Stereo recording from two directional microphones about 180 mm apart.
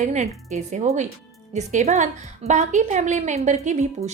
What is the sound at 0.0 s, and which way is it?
A woman's voice, 40° right (ahead or behind).